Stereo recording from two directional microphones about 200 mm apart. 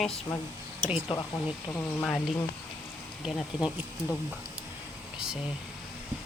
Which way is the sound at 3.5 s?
20° left (ahead or behind).